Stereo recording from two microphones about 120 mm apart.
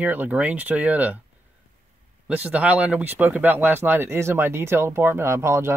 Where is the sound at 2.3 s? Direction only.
10° right (ahead or behind).